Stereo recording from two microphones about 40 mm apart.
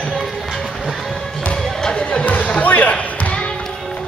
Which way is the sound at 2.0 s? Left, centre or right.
Left.